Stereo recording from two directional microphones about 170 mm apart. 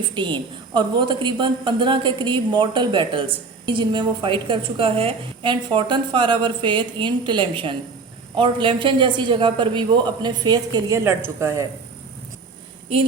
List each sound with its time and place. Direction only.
0.1 s a woman's voice: 30° right (ahead or behind)